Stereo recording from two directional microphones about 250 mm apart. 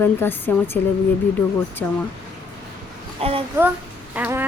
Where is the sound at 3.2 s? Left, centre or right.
Right.